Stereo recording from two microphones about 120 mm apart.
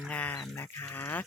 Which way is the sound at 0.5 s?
20° left (ahead or behind).